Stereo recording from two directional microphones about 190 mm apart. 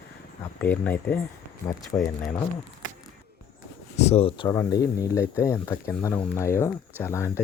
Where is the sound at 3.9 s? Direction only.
35° left (ahead or behind).